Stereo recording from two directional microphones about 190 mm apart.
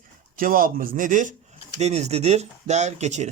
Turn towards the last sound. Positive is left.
turn(degrees=-40)  # may be behind; listen again after turning